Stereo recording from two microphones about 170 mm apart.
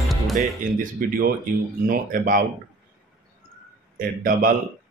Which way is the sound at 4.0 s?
55° right (ahead or behind).